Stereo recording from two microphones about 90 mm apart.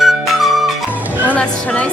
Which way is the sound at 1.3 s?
10° left (ahead or behind).